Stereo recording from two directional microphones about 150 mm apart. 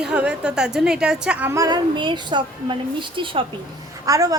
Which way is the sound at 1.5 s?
25° right (ahead or behind).